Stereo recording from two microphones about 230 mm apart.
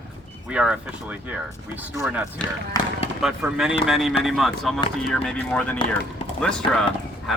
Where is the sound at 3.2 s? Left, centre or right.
Centre.